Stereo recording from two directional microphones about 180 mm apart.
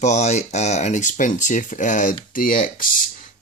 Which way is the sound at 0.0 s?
40° left (ahead or behind).